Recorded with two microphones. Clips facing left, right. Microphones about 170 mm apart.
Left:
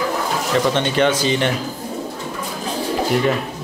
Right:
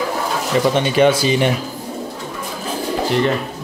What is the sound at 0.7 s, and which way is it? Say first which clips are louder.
Speech: right 3 dB; 10° right (ahead or behind).